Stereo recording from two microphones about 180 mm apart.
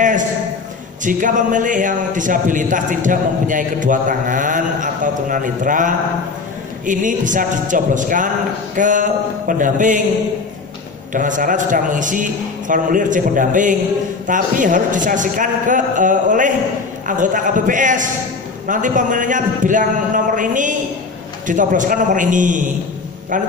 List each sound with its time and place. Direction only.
1.0 s speech: 45° right (ahead or behind)
11.1 s speech: 45° right (ahead or behind)